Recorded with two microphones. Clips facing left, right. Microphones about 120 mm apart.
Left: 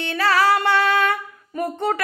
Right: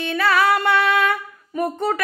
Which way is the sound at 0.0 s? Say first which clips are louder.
Even; 30° left (ahead or behind).